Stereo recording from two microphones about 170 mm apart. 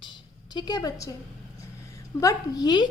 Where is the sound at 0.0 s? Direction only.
25° left (ahead or behind).